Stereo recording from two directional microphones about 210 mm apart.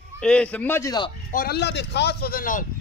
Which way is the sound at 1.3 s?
45° left (ahead or behind).